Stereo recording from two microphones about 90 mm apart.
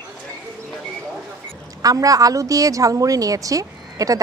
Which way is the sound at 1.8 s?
40° right (ahead or behind).